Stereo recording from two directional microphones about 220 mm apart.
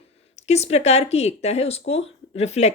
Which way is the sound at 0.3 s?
30° left (ahead or behind).